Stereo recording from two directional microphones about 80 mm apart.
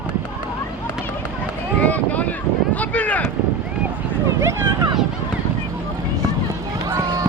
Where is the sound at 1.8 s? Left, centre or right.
Centre.